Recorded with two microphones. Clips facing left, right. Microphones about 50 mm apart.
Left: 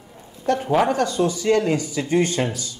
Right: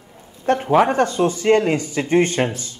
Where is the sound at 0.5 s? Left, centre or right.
Right.